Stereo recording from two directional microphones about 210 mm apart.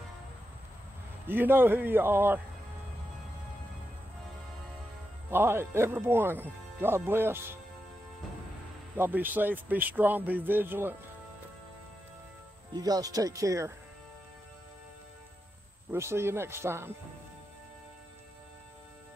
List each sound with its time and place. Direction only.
1.2 s speech: 10° right (ahead or behind)
5.3 s speech: 10° right (ahead or behind)
8.9 s speech: 10° right (ahead or behind)
12.7 s speech: 20° right (ahead or behind)
15.9 s speech: 10° right (ahead or behind)